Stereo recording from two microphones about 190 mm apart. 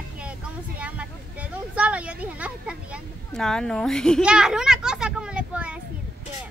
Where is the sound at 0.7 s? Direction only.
5° right (ahead or behind).